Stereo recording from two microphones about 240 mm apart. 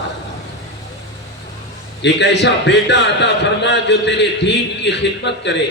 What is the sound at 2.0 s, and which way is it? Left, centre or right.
A man's voice, left.